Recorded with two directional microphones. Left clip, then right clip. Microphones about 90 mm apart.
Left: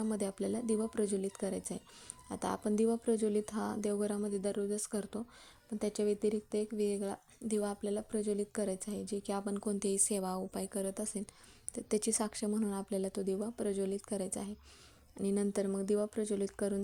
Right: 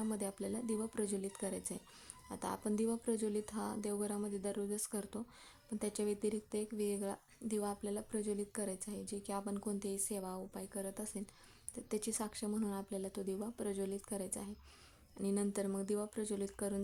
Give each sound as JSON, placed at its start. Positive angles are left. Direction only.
{"t": 0.1, "sound": "speech", "side_deg": 40}
{"t": 9.8, "sound": "speech", "side_deg": 70}
{"t": 10.9, "sound": "speech", "side_deg": 45}
{"t": 12.9, "sound": "speech", "side_deg": 50}
{"t": 13.1, "sound": "speech", "side_deg": 40}